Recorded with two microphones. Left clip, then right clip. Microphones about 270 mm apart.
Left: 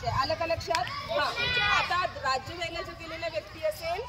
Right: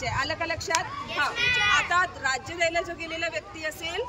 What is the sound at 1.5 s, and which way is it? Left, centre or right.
Speech, centre.